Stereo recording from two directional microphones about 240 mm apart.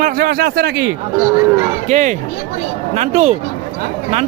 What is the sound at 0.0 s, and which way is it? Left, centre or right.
Speech, right.